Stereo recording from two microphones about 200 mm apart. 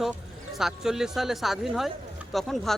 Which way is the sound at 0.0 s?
Centre (ahead or behind).